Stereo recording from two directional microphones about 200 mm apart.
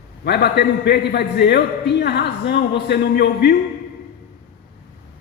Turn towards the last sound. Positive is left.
turn(degrees=55)  # may be behind; listen again after turning